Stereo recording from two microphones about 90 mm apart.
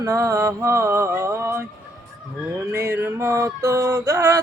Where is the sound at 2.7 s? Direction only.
30° right (ahead or behind).